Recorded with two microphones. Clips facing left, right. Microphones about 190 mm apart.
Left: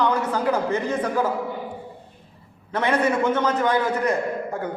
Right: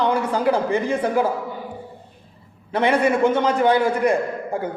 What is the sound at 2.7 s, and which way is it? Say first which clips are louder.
A man's voice: right 3 dB; 10° right (ahead or behind).